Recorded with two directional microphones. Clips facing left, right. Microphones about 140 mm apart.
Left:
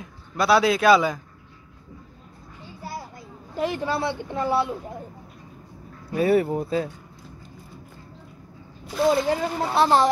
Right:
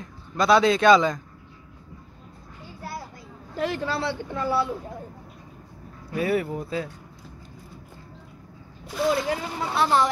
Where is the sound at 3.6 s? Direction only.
15° left (ahead or behind).